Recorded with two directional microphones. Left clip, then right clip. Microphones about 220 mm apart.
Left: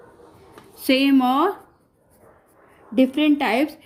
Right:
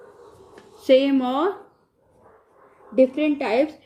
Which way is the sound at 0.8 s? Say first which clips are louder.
Right 1 dB; 50° left (ahead or behind).